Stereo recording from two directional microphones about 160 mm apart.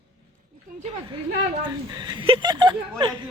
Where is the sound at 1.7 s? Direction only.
25° right (ahead or behind).